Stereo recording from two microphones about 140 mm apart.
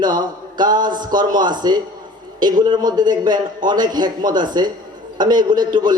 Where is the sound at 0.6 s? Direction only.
30° right (ahead or behind).